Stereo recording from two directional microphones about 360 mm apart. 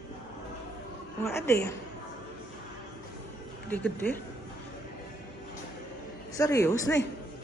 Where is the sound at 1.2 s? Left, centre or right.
Centre.